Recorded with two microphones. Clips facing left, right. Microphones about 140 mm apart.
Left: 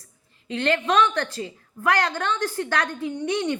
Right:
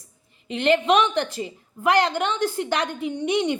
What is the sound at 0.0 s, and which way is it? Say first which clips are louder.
A woman's voice: right 1 dB; 20° right (ahead or behind).